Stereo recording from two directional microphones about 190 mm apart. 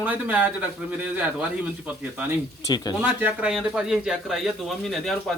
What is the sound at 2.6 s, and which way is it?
Speech, 20° left (ahead or behind).